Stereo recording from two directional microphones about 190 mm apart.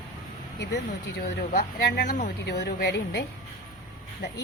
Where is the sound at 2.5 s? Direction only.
60° left (ahead or behind).